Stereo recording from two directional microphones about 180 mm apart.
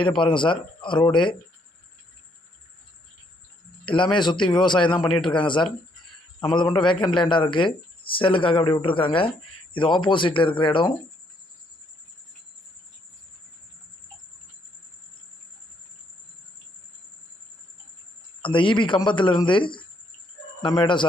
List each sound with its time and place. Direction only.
0.2 s a man's voice: 25° left (ahead or behind)
3.8 s a man's voice: 25° left (ahead or behind)
18.4 s a man's voice: 30° left (ahead or behind)